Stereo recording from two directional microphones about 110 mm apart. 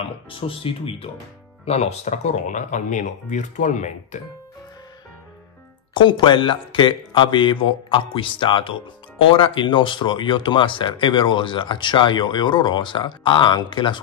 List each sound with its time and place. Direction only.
0.3 s speech: 55° left (ahead or behind)
1.7 s speech: 80° left
5.9 s speech: 45° left (ahead or behind)